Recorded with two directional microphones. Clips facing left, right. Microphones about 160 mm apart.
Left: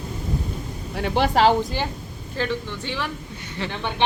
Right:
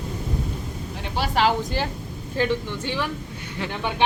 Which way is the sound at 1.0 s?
60° left (ahead or behind).